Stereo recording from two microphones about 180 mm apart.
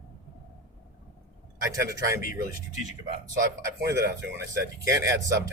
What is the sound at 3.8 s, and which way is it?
A man's voice, 15° right (ahead or behind).